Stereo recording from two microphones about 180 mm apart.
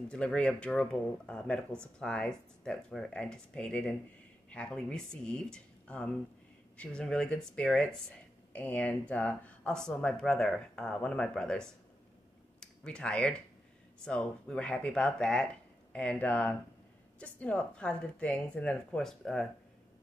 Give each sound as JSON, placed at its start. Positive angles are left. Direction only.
{"t": 0.1, "sound": "speech", "side_deg": 5}